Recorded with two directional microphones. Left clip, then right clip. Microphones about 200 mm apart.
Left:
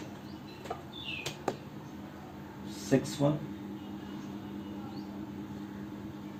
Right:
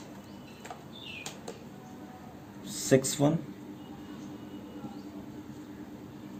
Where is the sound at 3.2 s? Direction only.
55° right (ahead or behind).